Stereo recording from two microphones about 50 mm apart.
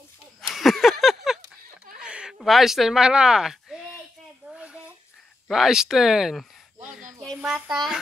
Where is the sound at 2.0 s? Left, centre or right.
Centre.